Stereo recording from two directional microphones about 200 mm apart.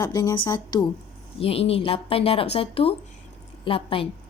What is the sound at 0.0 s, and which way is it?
A woman's voice, 20° left (ahead or behind).